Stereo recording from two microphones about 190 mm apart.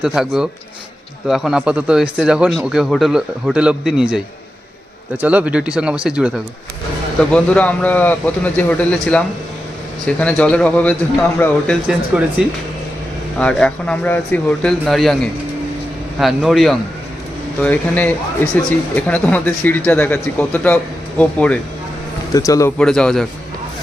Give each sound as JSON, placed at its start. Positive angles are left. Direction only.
{"t": 0.0, "sound": "a man's voice", "side_deg": -5}
{"t": 22.3, "sound": "speech", "side_deg": 20}
{"t": 22.8, "sound": "a man's voice", "side_deg": 5}